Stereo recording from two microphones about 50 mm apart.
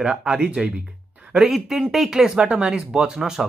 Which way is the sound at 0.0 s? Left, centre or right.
Centre.